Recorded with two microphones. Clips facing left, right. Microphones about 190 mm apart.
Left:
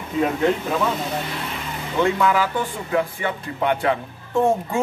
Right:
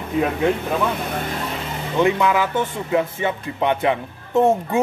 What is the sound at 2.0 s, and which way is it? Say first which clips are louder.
A man's voice: right 1 dB; 20° right (ahead or behind).